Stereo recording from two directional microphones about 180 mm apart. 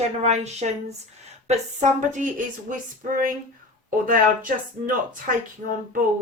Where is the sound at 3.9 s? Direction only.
50° right (ahead or behind).